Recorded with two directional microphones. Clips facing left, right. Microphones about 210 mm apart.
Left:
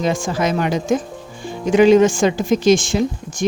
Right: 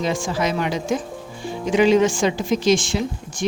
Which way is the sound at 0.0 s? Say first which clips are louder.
Left 3 dB; 50° left (ahead or behind).